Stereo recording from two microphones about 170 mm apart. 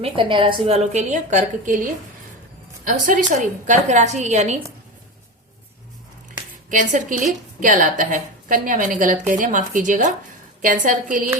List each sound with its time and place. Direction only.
0.0 s a woman's voice: 30° right (ahead or behind)
6.7 s a woman's voice: 50° right (ahead or behind)